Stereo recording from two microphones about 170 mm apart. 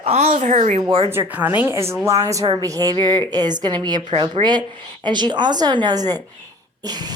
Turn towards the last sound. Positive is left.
turn(degrees=-25)  # may be behind; listen again after turning